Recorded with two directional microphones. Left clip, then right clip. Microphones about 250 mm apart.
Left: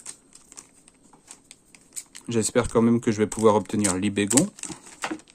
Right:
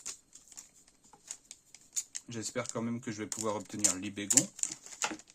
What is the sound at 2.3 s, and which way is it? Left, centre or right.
Speech, left.